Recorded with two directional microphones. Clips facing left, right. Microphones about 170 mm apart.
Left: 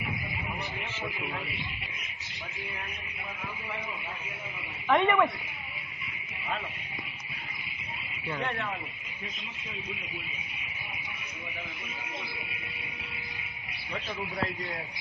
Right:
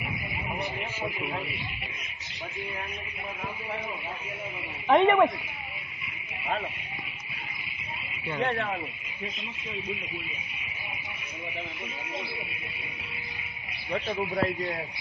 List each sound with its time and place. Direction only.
5.0 s speech: 35° right (ahead or behind)